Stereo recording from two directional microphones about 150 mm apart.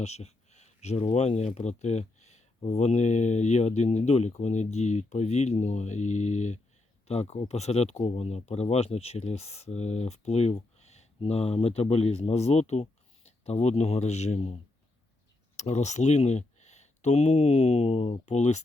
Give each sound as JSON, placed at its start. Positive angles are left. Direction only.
{"t": 0.0, "sound": "speech", "side_deg": 45}
{"t": 15.5, "sound": "speech", "side_deg": 50}